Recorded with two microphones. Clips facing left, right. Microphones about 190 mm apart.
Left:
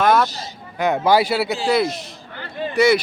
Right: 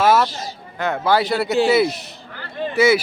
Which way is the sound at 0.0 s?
5° right (ahead or behind).